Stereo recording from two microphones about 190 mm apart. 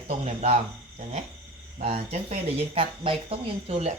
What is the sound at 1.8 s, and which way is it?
Speech, 35° right (ahead or behind).